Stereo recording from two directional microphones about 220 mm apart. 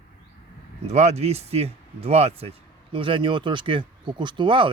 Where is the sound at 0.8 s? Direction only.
30° right (ahead or behind).